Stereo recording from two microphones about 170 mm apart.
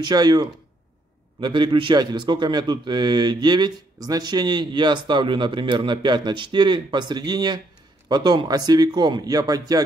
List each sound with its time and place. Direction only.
0.0 s a man's voice: 25° right (ahead or behind)